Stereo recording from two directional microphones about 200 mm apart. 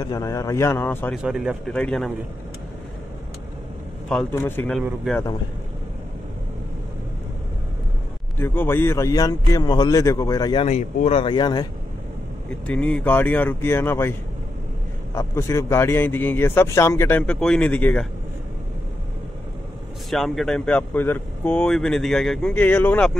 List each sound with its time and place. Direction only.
0.0 s a man's voice: 15° left (ahead or behind)
1.2 s speech: 5° right (ahead or behind)
4.1 s a man's voice: 5° left (ahead or behind)
4.7 s speech: centre (ahead or behind)
8.4 s a man's voice: 10° left (ahead or behind)
10.6 s speech: 35° left (ahead or behind)
12.4 s a man's voice: 5° left (ahead or behind)
15.1 s a man's voice: 15° left (ahead or behind)
20.1 s speech: centre (ahead or behind)